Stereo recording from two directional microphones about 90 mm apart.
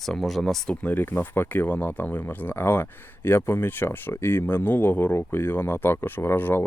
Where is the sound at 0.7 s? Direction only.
20° left (ahead or behind).